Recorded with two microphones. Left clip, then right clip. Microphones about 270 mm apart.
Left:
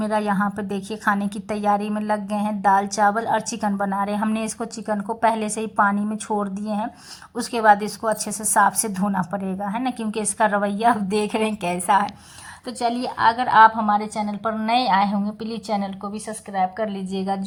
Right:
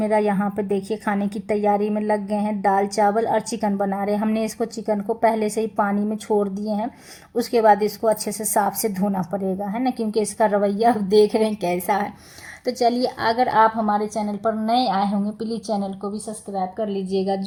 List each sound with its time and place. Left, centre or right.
0.0 s a woman's voice: centre
13.9 s a woman's voice: left